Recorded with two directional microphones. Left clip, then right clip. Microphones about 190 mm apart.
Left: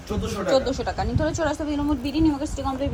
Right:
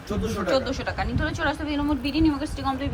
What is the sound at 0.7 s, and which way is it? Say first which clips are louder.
A woman's voice: left 2 dB; 25° left (ahead or behind).